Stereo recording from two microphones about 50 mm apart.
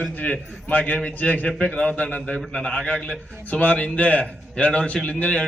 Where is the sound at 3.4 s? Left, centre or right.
Left.